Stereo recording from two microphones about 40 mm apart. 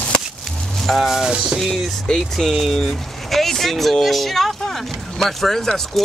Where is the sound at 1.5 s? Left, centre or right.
Centre.